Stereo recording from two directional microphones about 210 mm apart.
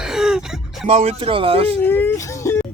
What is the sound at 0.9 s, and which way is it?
Speech, 30° right (ahead or behind).